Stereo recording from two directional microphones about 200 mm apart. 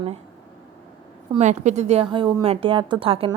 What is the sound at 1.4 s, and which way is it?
Speech, 35° right (ahead or behind).